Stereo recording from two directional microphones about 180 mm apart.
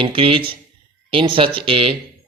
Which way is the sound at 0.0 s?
30° right (ahead or behind).